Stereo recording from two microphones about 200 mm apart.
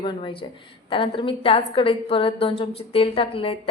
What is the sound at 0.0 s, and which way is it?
A woman's voice, 25° left (ahead or behind).